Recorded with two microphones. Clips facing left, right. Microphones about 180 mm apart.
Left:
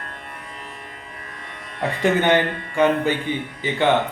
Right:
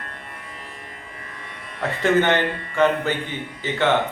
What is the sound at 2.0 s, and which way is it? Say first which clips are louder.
Speech: left 1 dB; 15° left (ahead or behind).